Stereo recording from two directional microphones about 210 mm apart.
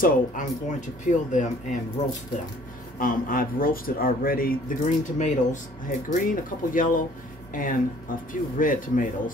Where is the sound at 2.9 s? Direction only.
40° left (ahead or behind).